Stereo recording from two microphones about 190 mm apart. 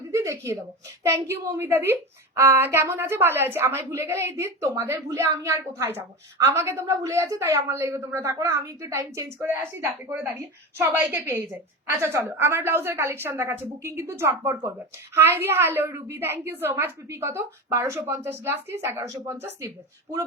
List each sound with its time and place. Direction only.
0.1 s a sound: 15° right (ahead or behind)
1.0 s a woman's voice: 15° right (ahead or behind)
10.8 s a woman's voice: 10° right (ahead or behind)